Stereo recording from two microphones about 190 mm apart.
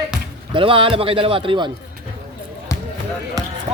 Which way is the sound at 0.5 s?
25° right (ahead or behind).